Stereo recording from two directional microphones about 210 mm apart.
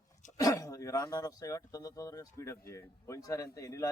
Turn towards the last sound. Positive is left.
turn(degrees=15)  # may be behind; listen again after turning